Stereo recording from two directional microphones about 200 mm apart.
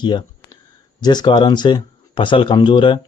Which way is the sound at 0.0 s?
25° left (ahead or behind).